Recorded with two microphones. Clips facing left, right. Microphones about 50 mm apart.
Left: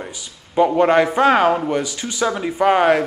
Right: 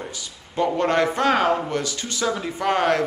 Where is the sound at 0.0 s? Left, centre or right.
Centre.